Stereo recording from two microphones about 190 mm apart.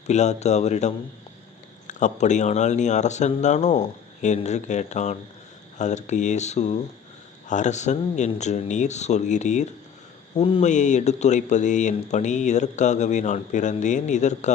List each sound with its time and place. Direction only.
0.1 s speech: 35° left (ahead or behind)